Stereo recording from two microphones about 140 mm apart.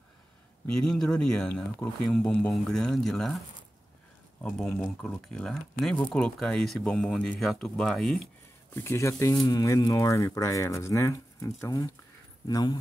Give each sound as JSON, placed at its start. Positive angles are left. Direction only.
{"t": 0.7, "sound": "speech", "side_deg": 5}
{"t": 8.7, "sound": "speech", "side_deg": 20}